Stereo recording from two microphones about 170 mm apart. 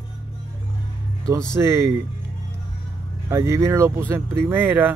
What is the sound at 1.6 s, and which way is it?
Speech, 15° right (ahead or behind).